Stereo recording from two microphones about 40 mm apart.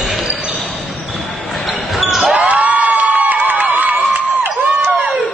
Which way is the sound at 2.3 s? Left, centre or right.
Right.